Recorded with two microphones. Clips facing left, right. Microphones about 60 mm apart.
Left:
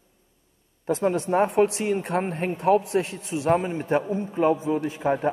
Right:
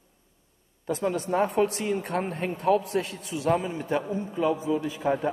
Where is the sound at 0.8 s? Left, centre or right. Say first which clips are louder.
Left 4 dB; left.